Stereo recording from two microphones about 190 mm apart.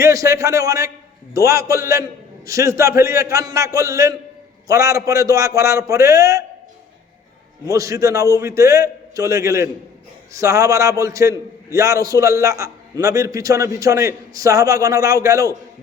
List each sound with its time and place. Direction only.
0.0 s a man's voice: 15° right (ahead or behind)
7.7 s a man's voice: 15° right (ahead or behind)